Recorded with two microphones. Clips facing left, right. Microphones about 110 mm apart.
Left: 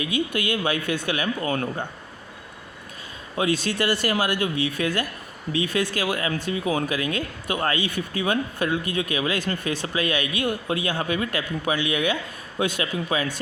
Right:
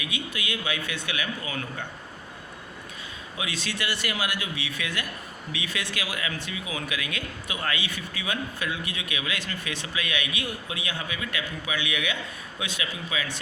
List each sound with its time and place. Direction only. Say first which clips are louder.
0.0 s speech: left 9 dB; 45° left (ahead or behind)
3.3 s speech: left 10 dB; 45° left (ahead or behind)